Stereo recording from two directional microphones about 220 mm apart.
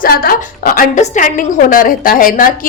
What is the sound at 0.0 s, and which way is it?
A woman's voice, 40° left (ahead or behind).